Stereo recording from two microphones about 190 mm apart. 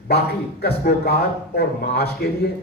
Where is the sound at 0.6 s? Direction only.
60° left (ahead or behind).